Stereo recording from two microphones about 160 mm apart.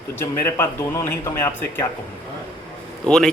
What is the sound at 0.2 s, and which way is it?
A man's voice, 15° left (ahead or behind).